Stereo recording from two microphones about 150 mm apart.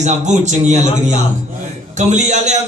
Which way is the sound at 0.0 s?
50° right (ahead or behind).